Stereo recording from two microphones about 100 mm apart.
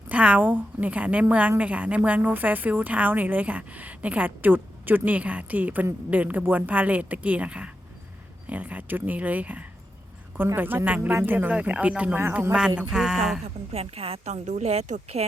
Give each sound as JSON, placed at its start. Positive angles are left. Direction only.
{"t": 0.1, "sound": "a woman's voice", "side_deg": -15}
{"t": 13.7, "sound": "a woman's voice", "side_deg": -85}